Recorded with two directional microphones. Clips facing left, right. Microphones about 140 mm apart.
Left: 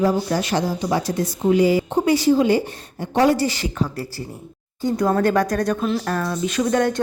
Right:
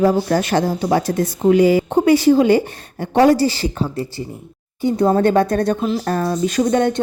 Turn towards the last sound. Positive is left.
turn(degrees=-25)  # may be behind; listen again after turning